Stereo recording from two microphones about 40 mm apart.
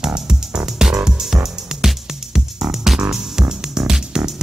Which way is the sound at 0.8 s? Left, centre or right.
Centre.